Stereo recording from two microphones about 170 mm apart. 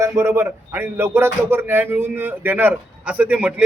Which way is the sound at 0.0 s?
15° right (ahead or behind).